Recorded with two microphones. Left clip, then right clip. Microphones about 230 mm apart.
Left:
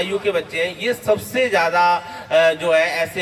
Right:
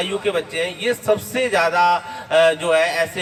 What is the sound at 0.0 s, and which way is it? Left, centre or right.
A man's voice, centre.